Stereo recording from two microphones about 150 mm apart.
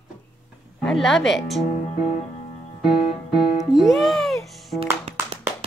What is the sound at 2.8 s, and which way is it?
Music, 5° right (ahead or behind).